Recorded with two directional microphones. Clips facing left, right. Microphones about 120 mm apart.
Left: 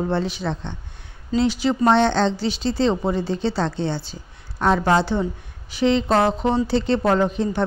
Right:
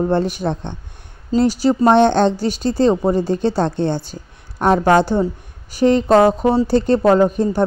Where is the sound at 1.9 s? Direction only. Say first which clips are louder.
Right 5 dB; 50° right (ahead or behind).